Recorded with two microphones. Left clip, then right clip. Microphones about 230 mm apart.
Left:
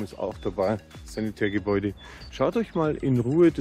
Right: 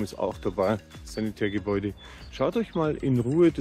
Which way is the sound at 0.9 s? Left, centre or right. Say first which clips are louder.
Even; centre.